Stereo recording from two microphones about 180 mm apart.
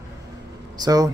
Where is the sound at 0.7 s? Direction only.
20° right (ahead or behind).